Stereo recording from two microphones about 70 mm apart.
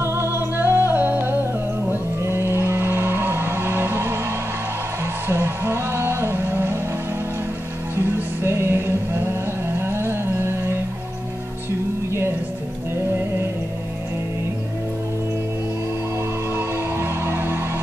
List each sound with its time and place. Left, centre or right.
0.0 s music: right
5.3 s music: right
7.9 s music: right
12.1 s music: right
16.5 s music: right